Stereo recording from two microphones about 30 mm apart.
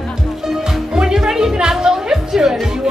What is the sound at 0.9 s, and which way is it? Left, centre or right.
Music, right.